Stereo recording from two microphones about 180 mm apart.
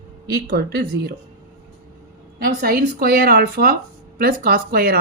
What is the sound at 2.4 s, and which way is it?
Speech, 55° right (ahead or behind).